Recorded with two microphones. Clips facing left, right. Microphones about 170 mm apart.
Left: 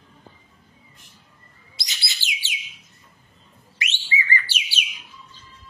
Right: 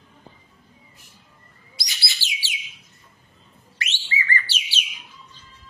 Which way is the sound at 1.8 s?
20° left (ahead or behind).